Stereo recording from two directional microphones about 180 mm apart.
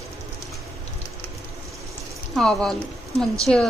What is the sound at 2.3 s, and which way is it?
Speech, centre (ahead or behind).